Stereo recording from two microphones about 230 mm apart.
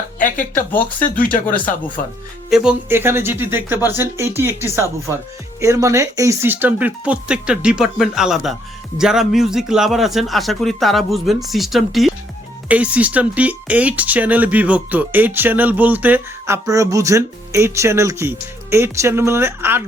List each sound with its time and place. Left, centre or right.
0.2 s speech: left
0.5 s speech: centre
2.5 s a man's voice: centre